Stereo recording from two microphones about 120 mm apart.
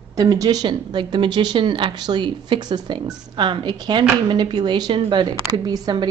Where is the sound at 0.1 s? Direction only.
30° right (ahead or behind).